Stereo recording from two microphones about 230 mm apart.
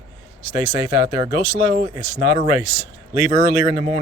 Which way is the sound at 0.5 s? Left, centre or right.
Centre.